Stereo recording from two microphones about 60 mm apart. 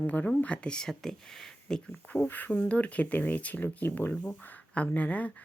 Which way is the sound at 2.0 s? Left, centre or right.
Left.